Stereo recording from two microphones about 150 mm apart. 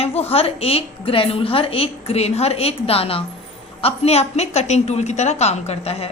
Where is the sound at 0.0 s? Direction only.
45° left (ahead or behind).